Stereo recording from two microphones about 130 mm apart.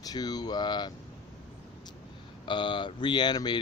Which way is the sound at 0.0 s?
30° left (ahead or behind).